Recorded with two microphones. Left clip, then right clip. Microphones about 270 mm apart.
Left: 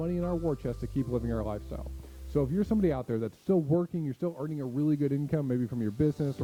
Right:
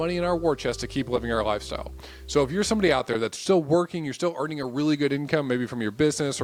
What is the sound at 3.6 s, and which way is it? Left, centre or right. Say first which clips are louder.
Speech: right 6 dB; right.